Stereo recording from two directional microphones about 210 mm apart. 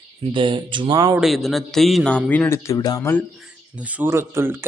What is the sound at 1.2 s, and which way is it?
A man's voice, centre (ahead or behind).